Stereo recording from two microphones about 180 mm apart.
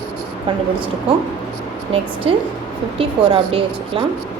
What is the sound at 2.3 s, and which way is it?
A woman's voice, 30° right (ahead or behind).